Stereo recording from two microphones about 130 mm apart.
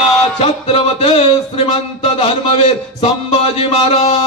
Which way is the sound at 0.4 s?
50° left (ahead or behind).